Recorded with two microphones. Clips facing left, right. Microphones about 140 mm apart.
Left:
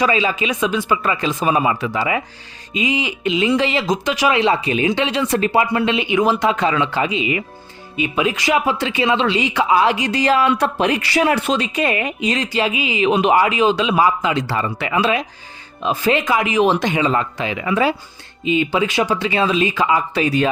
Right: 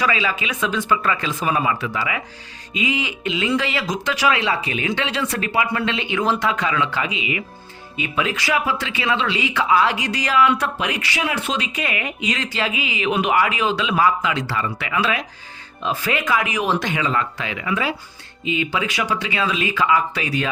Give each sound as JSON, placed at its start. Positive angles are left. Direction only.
{"t": 0.0, "sound": "speech", "side_deg": 25}
{"t": 6.4, "sound": "speech", "side_deg": 25}
{"t": 7.9, "sound": "speech", "side_deg": 20}
{"t": 12.4, "sound": "speech", "side_deg": 20}